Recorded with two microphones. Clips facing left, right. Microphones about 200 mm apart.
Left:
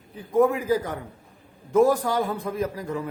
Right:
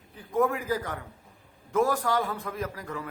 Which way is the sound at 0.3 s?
20° left (ahead or behind).